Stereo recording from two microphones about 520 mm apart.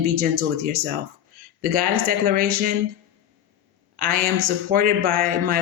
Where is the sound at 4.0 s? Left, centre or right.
Centre.